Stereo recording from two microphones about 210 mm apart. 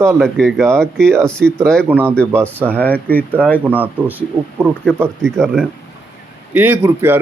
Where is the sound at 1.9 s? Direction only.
10° right (ahead or behind).